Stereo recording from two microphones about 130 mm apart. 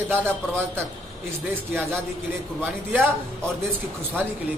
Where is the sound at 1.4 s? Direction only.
15° right (ahead or behind).